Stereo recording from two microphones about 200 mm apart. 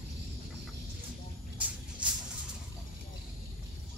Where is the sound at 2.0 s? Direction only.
5° right (ahead or behind).